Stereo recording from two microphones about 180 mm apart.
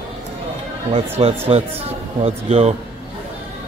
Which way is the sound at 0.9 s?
30° right (ahead or behind).